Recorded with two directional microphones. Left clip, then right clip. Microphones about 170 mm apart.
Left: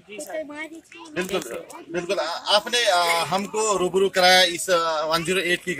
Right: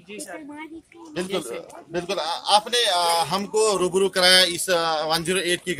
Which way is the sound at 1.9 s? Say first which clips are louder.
Left 1 dB; 30° right (ahead or behind).